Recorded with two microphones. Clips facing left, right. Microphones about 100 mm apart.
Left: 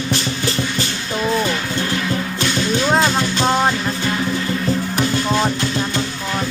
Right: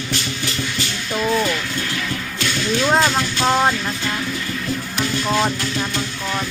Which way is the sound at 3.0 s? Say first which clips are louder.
Left 1 dB; 20° left (ahead or behind).